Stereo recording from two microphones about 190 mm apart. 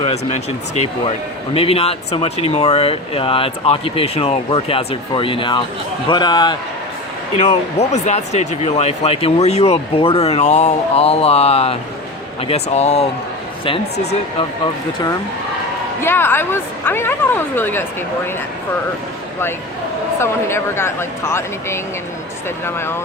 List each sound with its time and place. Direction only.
0.0 s speech: 30° left (ahead or behind)
7.3 s speech: 35° left (ahead or behind)
16.0 s speech: 10° left (ahead or behind)
20.1 s speech: 15° left (ahead or behind)